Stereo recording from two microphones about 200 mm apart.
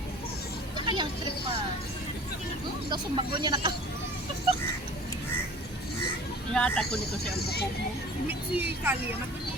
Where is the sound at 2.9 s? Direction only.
20° right (ahead or behind).